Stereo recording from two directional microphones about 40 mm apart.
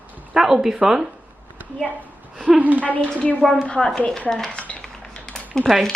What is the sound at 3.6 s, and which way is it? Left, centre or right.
Speech, left.